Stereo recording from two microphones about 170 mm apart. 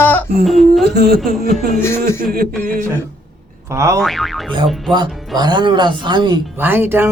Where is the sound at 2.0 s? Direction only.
60° right (ahead or behind).